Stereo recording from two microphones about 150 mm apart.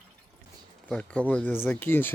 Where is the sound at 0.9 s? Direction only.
5° left (ahead or behind).